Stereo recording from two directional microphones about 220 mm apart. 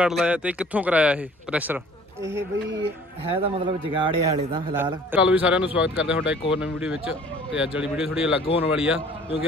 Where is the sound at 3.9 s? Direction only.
20° right (ahead or behind).